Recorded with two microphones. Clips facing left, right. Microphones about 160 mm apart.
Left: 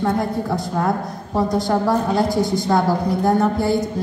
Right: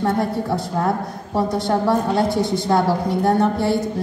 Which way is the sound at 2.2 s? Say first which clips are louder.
Left 1 dB; 25° right (ahead or behind).